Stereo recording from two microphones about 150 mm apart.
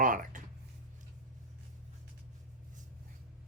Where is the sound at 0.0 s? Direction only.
60° right (ahead or behind).